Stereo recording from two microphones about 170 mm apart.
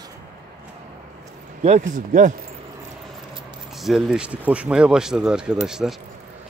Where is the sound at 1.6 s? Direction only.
45° right (ahead or behind).